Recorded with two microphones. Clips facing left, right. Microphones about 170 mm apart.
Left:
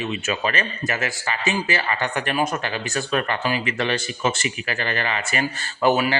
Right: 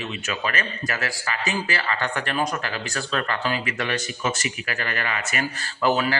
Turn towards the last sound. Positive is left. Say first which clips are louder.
# left 3 dB
turn(degrees=25)  # may be behind; listen again after turning